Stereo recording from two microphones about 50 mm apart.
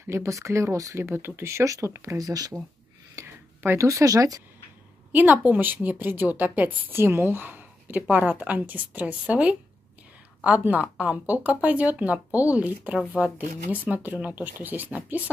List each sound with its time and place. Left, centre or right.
0.0 s speech: right
1.0 s speech: right
1.4 s speech: right
3.2 s a sound: right
3.7 s speech: right
5.1 s speech: right
6.9 s a woman's voice: right
10.6 s speech: right